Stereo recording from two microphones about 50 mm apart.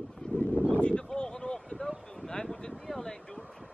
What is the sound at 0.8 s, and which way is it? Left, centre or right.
Speech, centre.